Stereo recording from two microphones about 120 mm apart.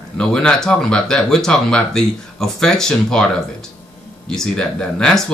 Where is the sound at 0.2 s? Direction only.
5° left (ahead or behind).